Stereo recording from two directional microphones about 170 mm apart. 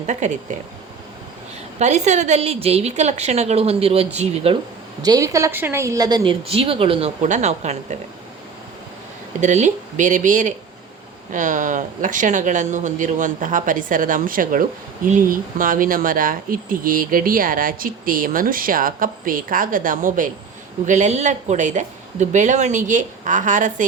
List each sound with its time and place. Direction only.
0.2 s speech: 45° right (ahead or behind)
1.8 s a woman's voice: 45° right (ahead or behind)
5.0 s a woman's voice: 20° right (ahead or behind); by 7.9 s 40° right (ahead or behind)
9.4 s speech: 45° right (ahead or behind)